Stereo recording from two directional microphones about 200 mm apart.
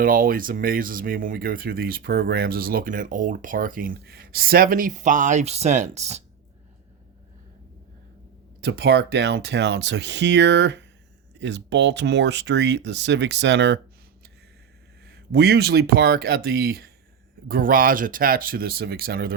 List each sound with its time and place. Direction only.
0.0 s speech: 45° right (ahead or behind)
8.6 s speech: 55° right (ahead or behind)
15.0 s speech: 50° right (ahead or behind)